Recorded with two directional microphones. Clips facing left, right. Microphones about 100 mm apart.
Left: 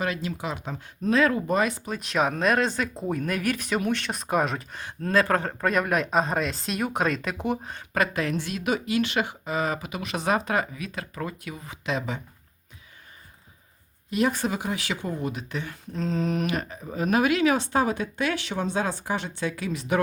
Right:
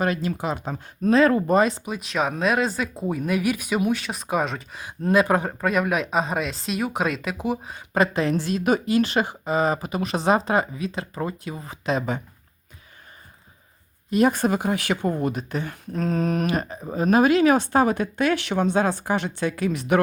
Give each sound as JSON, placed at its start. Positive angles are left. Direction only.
{"t": 0.0, "sound": "speech", "side_deg": -45}
{"t": 2.0, "sound": "speech", "side_deg": 0}
{"t": 4.9, "sound": "speech", "side_deg": -15}
{"t": 5.5, "sound": "speech", "side_deg": 0}
{"t": 7.9, "sound": "speech", "side_deg": -25}
{"t": 14.1, "sound": "speech", "side_deg": -45}